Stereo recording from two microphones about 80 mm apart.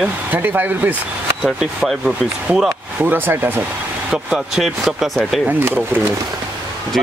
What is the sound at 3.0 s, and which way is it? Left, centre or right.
Speech, right.